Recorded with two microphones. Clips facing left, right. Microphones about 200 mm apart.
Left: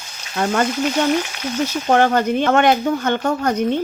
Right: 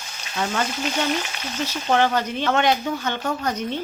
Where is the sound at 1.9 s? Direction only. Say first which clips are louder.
Left 5 dB; 50° left (ahead or behind).